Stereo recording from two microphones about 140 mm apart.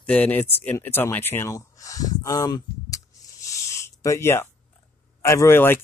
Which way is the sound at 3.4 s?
20° left (ahead or behind).